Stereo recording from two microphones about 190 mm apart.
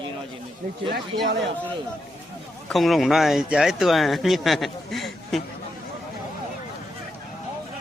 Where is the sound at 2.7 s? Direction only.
Centre (ahead or behind).